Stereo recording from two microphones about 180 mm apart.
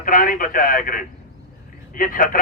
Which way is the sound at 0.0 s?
50° left (ahead or behind).